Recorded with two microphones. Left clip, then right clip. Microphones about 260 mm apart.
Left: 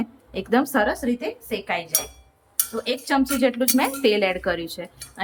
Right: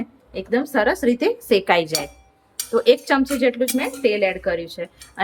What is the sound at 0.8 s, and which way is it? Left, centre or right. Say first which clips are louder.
A woman's voice: right 6 dB; centre.